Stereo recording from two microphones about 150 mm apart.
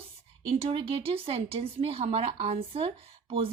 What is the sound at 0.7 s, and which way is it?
A woman's voice, 40° right (ahead or behind).